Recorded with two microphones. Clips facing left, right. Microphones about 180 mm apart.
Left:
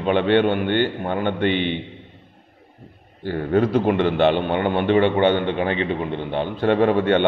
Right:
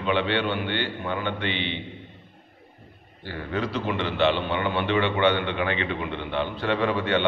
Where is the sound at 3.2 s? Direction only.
50° left (ahead or behind).